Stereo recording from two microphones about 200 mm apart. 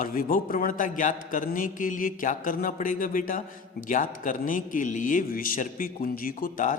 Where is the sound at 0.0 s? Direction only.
45° left (ahead or behind).